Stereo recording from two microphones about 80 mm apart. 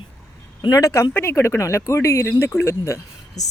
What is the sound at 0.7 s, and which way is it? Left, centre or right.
Speech, left.